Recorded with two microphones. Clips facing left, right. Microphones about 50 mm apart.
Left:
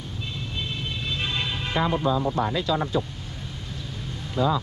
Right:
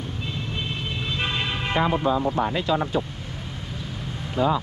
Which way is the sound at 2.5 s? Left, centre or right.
Right.